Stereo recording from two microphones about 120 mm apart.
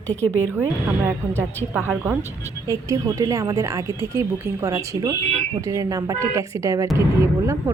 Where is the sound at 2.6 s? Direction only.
25° right (ahead or behind).